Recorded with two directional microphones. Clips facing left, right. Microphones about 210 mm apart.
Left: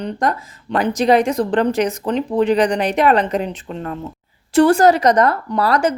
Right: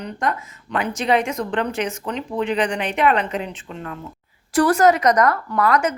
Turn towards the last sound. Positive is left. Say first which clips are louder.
# left 2 dB
turn(degrees=30)  # may be behind; listen again after turning